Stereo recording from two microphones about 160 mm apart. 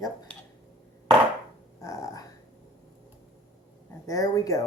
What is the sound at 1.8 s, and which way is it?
Dog, 20° left (ahead or behind).